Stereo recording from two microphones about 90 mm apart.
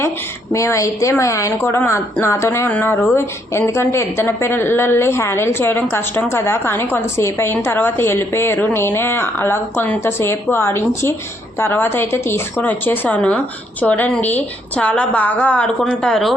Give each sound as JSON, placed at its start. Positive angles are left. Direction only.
{"t": 0.5, "sound": "a woman's voice", "side_deg": 35}